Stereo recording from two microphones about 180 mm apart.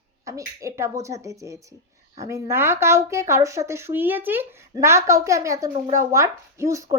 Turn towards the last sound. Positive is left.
turn(degrees=-15)  # may be behind; listen again after turning